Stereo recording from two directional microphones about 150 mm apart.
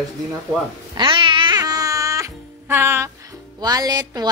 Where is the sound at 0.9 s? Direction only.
35° right (ahead or behind); by 3.1 s 15° right (ahead or behind).